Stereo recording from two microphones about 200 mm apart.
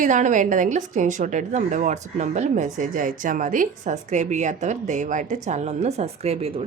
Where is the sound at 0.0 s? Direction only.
40° right (ahead or behind).